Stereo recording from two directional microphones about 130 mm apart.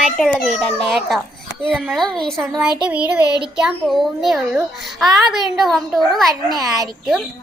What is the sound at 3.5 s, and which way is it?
A woman's voice, centre (ahead or behind).